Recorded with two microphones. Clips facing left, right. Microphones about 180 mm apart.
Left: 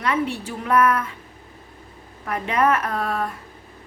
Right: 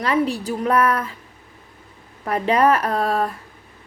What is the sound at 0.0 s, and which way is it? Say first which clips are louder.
A woman's voice: right 3 dB; 35° right (ahead or behind).